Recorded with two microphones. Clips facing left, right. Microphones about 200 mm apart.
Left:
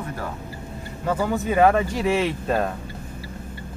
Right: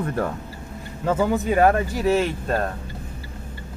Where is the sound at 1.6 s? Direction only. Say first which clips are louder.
Left 2 dB; centre (ahead or behind).